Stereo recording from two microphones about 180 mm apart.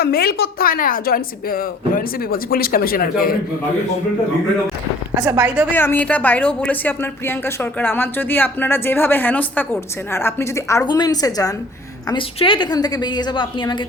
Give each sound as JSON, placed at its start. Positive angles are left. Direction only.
{"t": 0.0, "sound": "a woman's voice", "side_deg": 60}
{"t": 5.1, "sound": "speech", "side_deg": -15}
{"t": 5.7, "sound": "a woman's voice", "side_deg": 10}